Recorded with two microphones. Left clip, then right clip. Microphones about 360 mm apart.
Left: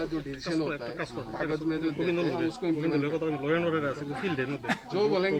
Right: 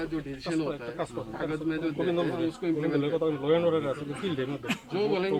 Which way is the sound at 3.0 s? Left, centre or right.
Centre.